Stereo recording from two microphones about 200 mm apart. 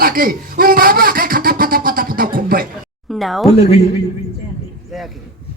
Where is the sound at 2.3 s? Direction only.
45° right (ahead or behind).